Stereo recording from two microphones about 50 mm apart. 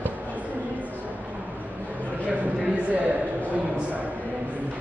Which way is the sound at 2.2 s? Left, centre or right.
Right.